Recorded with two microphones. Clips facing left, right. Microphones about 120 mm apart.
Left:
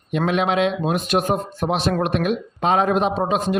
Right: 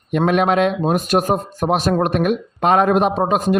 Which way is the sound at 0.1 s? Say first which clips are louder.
Right 4 dB; 50° right (ahead or behind).